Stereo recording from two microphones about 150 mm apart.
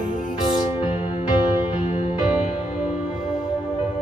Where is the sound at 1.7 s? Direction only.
40° left (ahead or behind).